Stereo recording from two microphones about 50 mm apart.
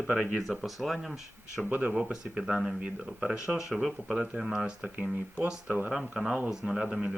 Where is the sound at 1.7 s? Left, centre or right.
Right.